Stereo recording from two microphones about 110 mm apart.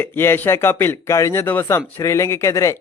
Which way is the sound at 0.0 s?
20° left (ahead or behind).